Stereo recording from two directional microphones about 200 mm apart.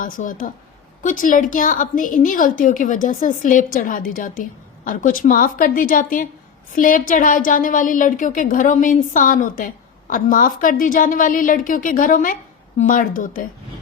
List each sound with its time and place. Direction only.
0.0 s a woman's voice: 40° left (ahead or behind)